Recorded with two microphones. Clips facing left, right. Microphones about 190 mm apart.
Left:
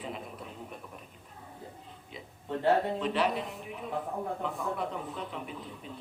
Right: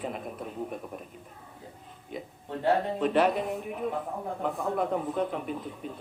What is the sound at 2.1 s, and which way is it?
A man's voice, 50° right (ahead or behind).